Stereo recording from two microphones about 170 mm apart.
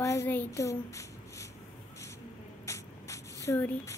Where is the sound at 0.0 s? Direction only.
15° left (ahead or behind).